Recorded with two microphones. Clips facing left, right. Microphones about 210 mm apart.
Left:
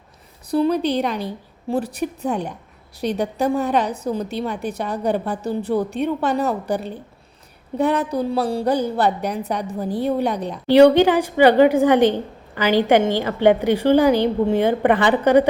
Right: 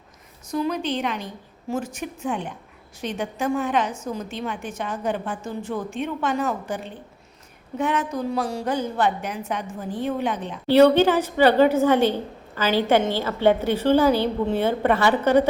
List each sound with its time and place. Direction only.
0.5 s a woman's voice: 35° left (ahead or behind)
10.7 s a woman's voice: 15° left (ahead or behind)